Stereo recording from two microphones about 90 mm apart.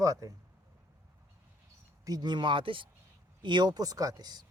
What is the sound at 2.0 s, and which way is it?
Speech, 50° right (ahead or behind).